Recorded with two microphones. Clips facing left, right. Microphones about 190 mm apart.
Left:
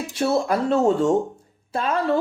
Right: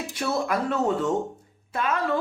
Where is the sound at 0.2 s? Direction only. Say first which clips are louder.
Left 5 dB; 30° left (ahead or behind).